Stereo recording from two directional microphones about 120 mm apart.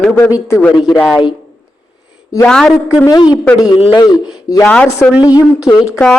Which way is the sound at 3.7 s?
40° left (ahead or behind).